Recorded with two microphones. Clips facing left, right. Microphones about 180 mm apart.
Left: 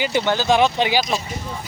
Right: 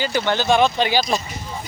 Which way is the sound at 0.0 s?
20° left (ahead or behind).